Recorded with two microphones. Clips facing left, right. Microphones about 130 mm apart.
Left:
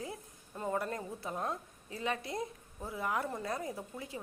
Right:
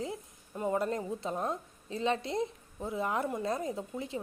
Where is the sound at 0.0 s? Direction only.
20° right (ahead or behind).